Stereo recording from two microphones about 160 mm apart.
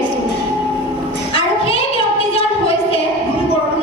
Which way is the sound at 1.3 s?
35° left (ahead or behind).